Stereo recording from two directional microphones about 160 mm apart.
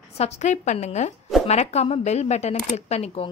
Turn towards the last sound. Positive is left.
turn(degrees=40)  # may be behind; listen again after turning